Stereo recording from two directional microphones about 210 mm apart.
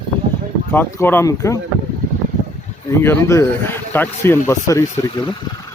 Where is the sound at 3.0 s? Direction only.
10° left (ahead or behind).